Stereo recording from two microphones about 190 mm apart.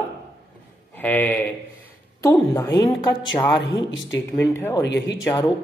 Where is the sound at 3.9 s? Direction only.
75° left (ahead or behind).